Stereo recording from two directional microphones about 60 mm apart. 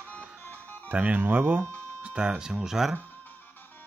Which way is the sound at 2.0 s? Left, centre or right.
Centre.